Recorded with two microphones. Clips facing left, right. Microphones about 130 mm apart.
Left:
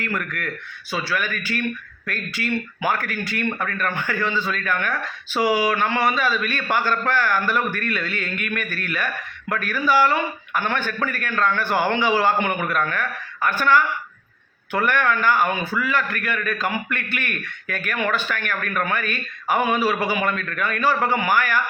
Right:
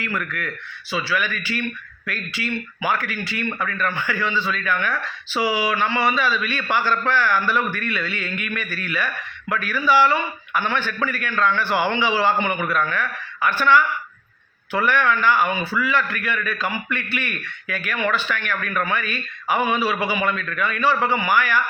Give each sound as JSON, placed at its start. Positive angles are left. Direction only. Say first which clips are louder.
{"t": 0.0, "sound": "speech", "louder": "even", "side_deg": 45}